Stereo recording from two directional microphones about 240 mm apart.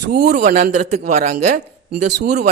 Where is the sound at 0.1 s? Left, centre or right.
Right.